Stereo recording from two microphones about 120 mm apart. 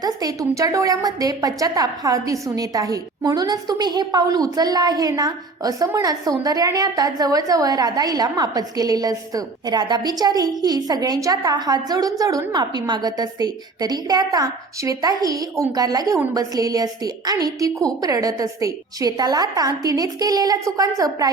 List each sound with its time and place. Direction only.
0.0 s a woman's voice: 30° right (ahead or behind)